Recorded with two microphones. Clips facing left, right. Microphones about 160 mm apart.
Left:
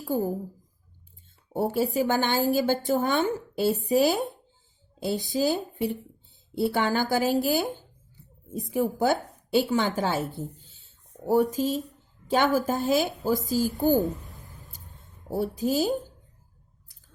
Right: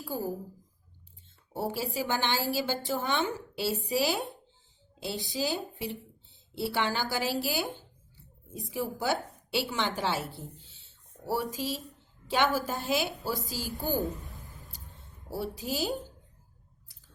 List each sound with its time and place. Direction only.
0.0 s a woman's voice: 50° left (ahead or behind)
1.5 s speech: 50° left (ahead or behind)
6.6 s a woman's voice: 50° left (ahead or behind)
15.3 s speech: 45° left (ahead or behind)